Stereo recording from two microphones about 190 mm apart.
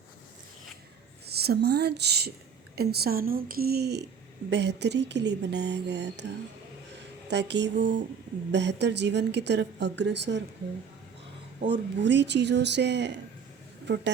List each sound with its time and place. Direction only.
1.3 s speech: 55° right (ahead or behind)
11.7 s speech: 70° right (ahead or behind)